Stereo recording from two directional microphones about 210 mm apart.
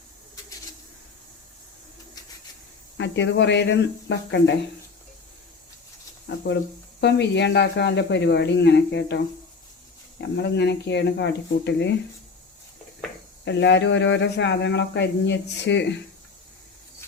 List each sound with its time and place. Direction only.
3.0 s speech: 60° left (ahead or behind)
6.2 s speech: 55° left (ahead or behind)
13.4 s speech: 55° left (ahead or behind)